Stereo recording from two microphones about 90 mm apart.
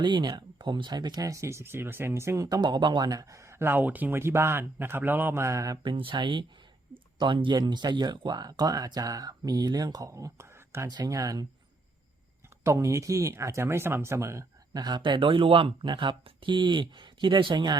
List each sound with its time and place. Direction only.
0.0 s speech: 60° right (ahead or behind); by 2.6 s 35° right (ahead or behind)
2.6 s speech: 55° right (ahead or behind); by 5.8 s 35° right (ahead or behind)
5.8 s speech: 65° right (ahead or behind); by 10.8 s 30° right (ahead or behind)
10.8 s speech: 45° right (ahead or behind)
12.6 s speech: 35° right (ahead or behind)
14.7 s speech: 50° right (ahead or behind)